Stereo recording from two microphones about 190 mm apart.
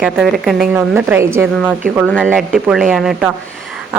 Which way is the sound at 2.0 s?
5° left (ahead or behind).